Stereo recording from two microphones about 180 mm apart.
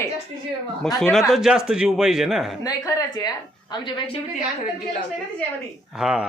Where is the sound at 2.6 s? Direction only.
20° left (ahead or behind).